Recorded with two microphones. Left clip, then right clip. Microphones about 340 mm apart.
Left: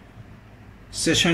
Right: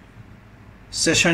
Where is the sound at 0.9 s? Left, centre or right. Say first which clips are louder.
Right 2 dB; centre.